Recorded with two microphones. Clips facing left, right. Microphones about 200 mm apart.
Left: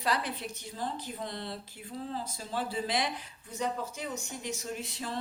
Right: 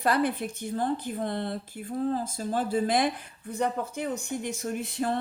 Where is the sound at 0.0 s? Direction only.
55° right (ahead or behind).